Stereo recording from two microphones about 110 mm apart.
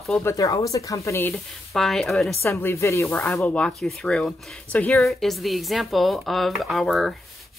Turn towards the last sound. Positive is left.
turn(degrees=0)  # may be behind; listen again after turning